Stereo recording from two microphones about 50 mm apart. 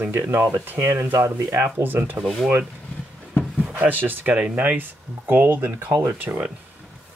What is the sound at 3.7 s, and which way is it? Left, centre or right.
Speech, right.